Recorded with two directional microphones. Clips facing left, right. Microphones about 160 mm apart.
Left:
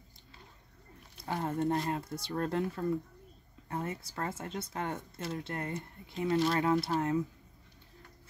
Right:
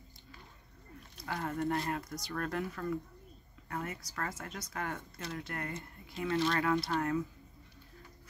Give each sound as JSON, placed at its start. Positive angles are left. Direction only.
{"t": 1.2, "sound": "speech", "side_deg": 25}